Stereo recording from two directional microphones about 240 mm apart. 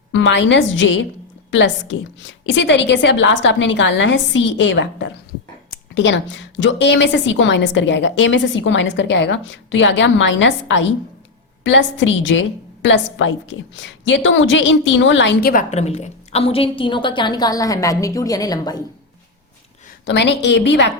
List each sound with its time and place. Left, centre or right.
0.1 s a woman's voice: left; by 18.8 s centre
20.1 s a woman's voice: left